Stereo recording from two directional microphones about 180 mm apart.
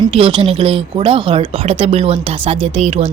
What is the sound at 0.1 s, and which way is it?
Speech, 30° right (ahead or behind).